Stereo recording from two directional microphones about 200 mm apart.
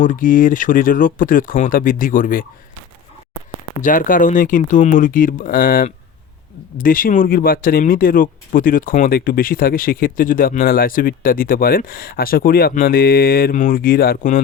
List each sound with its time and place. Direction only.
0.0 s speech: 40° left (ahead or behind)
3.8 s speech: 40° left (ahead or behind)